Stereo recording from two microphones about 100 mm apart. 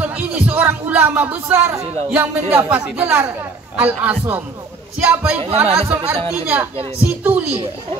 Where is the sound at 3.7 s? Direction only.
15° right (ahead or behind).